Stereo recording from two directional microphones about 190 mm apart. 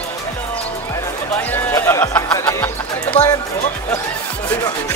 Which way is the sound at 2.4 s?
10° left (ahead or behind).